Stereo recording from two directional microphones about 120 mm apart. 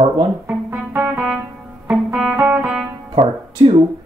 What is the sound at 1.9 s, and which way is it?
Music, 10° right (ahead or behind).